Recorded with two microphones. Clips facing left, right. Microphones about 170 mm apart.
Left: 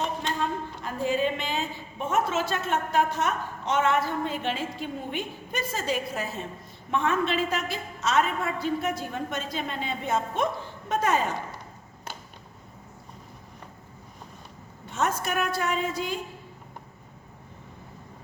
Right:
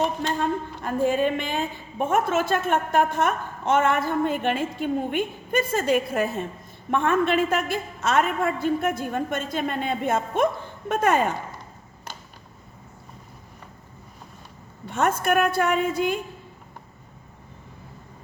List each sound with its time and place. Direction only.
0.8 s a woman's voice: 50° right (ahead or behind)
14.9 s a woman's voice: 55° right (ahead or behind)